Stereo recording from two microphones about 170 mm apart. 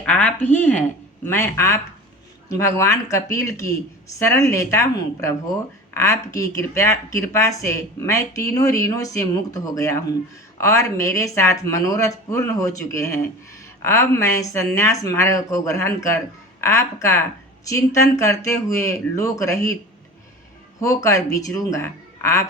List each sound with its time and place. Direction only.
0.0 s speech: 10° left (ahead or behind)
20.8 s speech: 20° left (ahead or behind)